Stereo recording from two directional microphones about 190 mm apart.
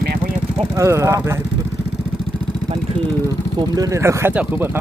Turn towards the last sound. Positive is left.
turn(degrees=-10)  # may be behind; listen again after turning